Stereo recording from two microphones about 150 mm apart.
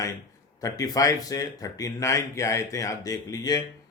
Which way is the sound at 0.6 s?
25° left (ahead or behind).